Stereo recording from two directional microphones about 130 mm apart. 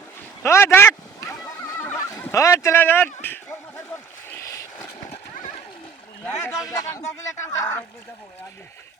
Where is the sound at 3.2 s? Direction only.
15° left (ahead or behind).